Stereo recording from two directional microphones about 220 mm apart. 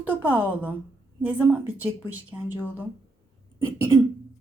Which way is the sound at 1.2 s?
10° right (ahead or behind).